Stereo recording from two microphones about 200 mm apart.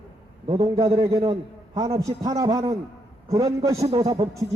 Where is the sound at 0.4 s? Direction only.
30° right (ahead or behind).